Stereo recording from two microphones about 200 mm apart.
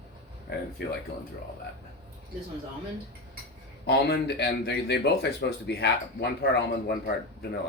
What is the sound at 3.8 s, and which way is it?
Speech, 55° left (ahead or behind).